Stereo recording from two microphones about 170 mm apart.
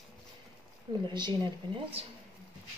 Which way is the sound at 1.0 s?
25° right (ahead or behind).